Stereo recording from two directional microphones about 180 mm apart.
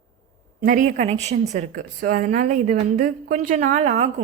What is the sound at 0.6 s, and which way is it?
Speech, 50° right (ahead or behind).